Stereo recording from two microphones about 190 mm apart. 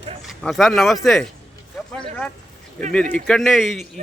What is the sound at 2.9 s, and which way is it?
Speech, 5° left (ahead or behind).